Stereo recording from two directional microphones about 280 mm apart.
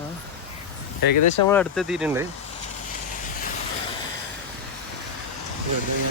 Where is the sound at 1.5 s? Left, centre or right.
Centre.